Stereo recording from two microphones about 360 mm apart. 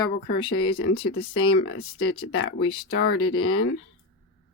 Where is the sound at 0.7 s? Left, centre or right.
Left.